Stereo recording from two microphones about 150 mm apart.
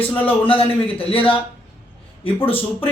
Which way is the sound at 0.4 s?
40° left (ahead or behind).